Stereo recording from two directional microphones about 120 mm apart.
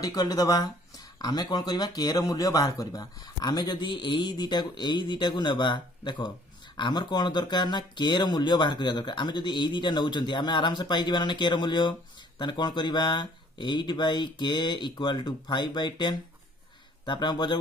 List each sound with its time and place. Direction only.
0.0 s speech: 30° left (ahead or behind)